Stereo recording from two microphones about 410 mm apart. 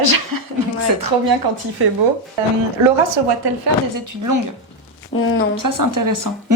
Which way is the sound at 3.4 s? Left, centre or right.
Right.